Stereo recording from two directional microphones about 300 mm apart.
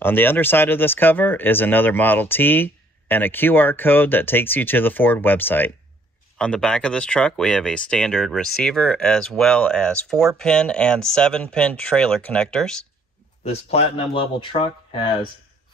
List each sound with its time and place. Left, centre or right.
0.0 s speech: centre
13.4 s speech: left